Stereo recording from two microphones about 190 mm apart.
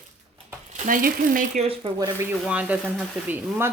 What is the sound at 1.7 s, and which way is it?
Speech, 25° right (ahead or behind).